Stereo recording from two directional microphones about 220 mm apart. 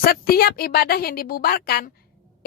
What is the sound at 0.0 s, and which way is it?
A woman's voice, 45° left (ahead or behind).